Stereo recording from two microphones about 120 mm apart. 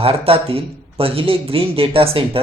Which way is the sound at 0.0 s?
55° right (ahead or behind).